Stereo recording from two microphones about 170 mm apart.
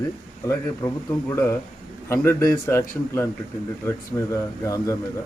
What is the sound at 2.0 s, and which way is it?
Speech, 15° left (ahead or behind).